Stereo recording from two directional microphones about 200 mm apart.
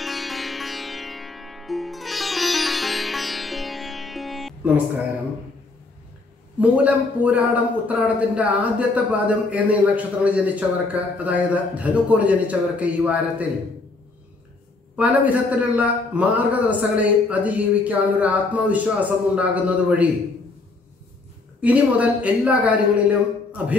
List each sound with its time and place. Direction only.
0.0 s music: centre (ahead or behind)
6.6 s speech: 5° right (ahead or behind)
15.0 s speech: 5° right (ahead or behind)
21.5 s speech: 5° right (ahead or behind)